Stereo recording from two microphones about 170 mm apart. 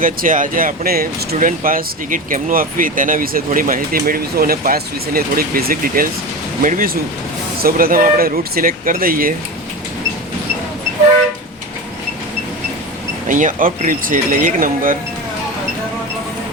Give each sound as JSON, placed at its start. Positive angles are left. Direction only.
{"t": 0.0, "sound": "speech", "side_deg": -55}
{"t": 13.2, "sound": "speech", "side_deg": -50}